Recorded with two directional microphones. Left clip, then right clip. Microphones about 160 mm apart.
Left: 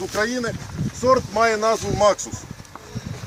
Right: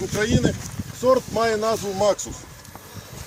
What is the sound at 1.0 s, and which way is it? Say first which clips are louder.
Speech: left 2 dB; 20° right (ahead or behind).